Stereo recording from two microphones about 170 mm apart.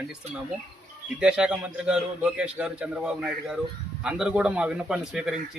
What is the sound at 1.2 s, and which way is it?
A man's voice, 5° right (ahead or behind).